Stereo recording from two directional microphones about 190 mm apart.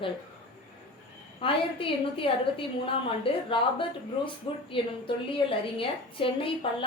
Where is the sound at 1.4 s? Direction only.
30° left (ahead or behind).